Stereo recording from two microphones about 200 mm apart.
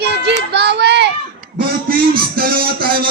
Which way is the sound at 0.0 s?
55° right (ahead or behind).